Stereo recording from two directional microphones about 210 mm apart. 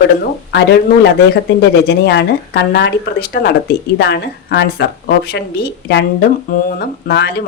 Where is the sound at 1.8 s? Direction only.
55° left (ahead or behind).